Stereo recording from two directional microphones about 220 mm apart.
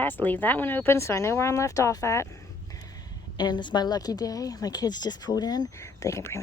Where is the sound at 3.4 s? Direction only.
20° left (ahead or behind).